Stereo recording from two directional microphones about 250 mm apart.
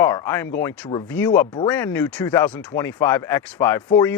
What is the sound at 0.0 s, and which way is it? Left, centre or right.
Speech, centre.